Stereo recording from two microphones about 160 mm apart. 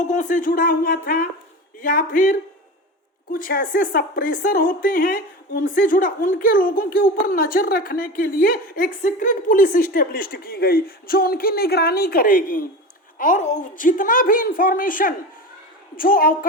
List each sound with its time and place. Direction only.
0.0 s a woman's voice: 50° left (ahead or behind); by 1.3 s 70° left (ahead or behind)
1.8 s a woman's voice: 55° left (ahead or behind)